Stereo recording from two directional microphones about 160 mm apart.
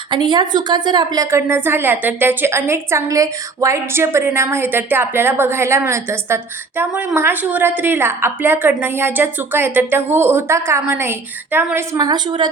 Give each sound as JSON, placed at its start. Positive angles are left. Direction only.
{"t": 0.1, "sound": "a woman's voice", "side_deg": -25}